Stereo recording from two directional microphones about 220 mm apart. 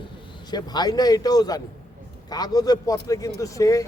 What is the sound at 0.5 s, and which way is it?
A man's voice, 20° left (ahead or behind).